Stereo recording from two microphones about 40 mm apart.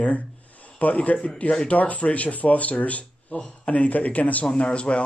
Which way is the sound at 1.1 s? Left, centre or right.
Left.